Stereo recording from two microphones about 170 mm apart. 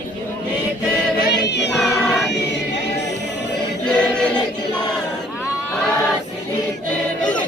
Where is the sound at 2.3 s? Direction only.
90° left.